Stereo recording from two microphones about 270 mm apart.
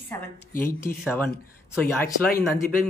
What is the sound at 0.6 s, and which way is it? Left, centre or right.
A man's voice, centre.